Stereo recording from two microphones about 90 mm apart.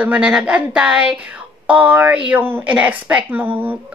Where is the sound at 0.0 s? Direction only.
15° right (ahead or behind).